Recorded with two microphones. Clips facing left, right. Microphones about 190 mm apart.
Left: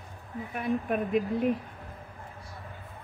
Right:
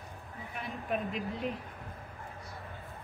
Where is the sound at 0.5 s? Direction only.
55° left (ahead or behind).